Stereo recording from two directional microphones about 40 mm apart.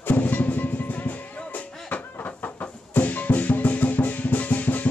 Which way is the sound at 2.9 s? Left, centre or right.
Left.